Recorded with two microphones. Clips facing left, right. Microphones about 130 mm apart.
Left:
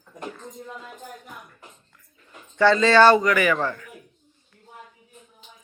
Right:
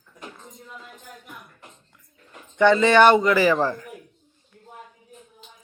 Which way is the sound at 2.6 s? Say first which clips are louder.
Right 1 dB; 20° right (ahead or behind).